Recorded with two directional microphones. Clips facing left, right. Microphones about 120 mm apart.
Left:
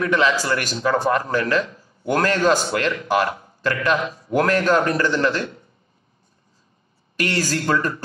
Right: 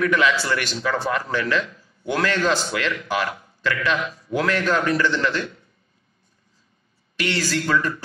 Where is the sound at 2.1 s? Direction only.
40° left (ahead or behind).